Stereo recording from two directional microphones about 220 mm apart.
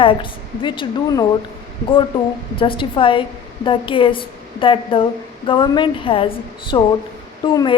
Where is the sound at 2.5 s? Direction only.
25° left (ahead or behind).